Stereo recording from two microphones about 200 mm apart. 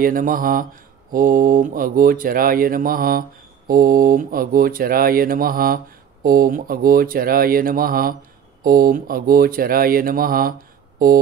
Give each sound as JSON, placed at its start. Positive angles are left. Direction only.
{"t": 0.0, "sound": "speech", "side_deg": -45}